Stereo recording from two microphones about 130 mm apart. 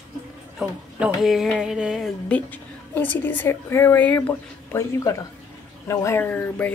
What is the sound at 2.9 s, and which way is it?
A woman's voice, 15° left (ahead or behind).